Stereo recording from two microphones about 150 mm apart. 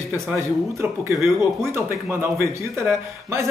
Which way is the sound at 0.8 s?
15° right (ahead or behind).